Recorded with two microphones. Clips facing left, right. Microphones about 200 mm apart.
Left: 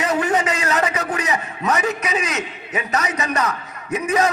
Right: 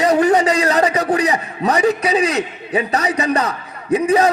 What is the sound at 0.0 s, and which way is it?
A man's voice, 35° right (ahead or behind).